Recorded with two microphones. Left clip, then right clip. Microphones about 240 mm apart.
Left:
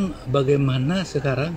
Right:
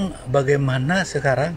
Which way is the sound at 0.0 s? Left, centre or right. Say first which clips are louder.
Right 2 dB; right.